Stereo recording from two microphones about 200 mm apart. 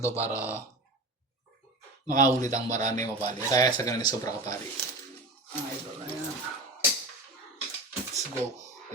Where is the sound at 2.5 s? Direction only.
35° right (ahead or behind).